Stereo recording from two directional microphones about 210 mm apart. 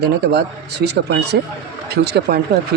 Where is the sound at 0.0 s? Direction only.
50° right (ahead or behind).